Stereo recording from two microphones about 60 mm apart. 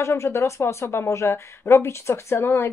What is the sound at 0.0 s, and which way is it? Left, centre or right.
A woman's voice, left.